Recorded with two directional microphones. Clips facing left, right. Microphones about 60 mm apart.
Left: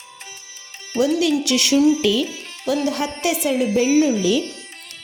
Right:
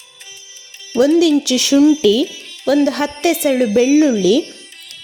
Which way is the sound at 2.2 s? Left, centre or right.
Left.